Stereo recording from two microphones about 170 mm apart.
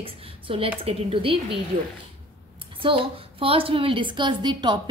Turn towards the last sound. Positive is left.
turn(degrees=-25)  # may be behind; listen again after turning